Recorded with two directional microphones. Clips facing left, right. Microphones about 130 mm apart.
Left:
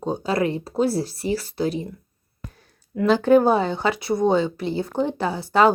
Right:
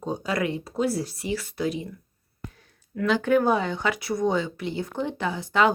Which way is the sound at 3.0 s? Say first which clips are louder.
Left 5 dB; 35° left (ahead or behind).